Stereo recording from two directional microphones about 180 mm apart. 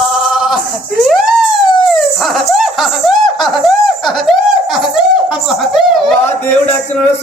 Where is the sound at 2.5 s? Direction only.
Centre (ahead or behind).